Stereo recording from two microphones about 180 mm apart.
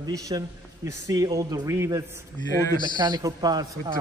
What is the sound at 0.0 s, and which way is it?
A man's voice, 20° right (ahead or behind).